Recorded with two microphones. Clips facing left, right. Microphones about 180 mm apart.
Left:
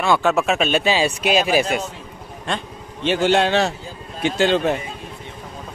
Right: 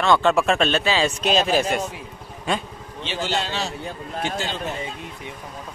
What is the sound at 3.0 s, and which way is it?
A man's voice, 55° left (ahead or behind).